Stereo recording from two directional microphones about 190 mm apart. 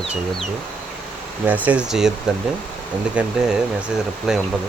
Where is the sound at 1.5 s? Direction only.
10° right (ahead or behind).